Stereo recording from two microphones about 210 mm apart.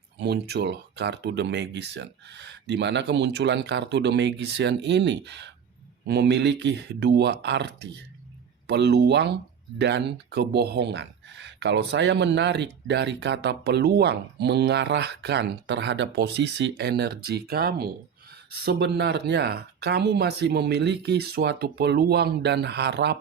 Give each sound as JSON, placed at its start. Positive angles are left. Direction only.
{"t": 0.2, "sound": "speech", "side_deg": -55}